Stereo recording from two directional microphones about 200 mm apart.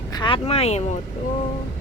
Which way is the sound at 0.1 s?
25° left (ahead or behind).